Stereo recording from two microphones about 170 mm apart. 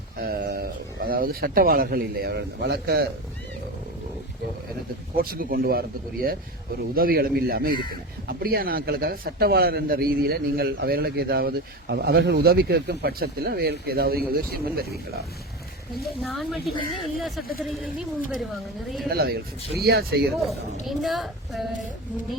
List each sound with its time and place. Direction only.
0.2 s a man's voice: 70° right (ahead or behind)
5.1 s a man's voice: 60° right (ahead or behind)
16.2 s a woman's voice: centre (ahead or behind)
19.0 s a man's voice: 65° right (ahead or behind)
20.8 s a woman's voice: centre (ahead or behind)